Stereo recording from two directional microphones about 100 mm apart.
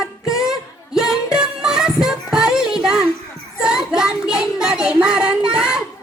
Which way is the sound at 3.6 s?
5° right (ahead or behind).